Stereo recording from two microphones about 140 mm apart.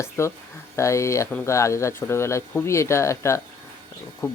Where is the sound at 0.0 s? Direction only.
20° left (ahead or behind).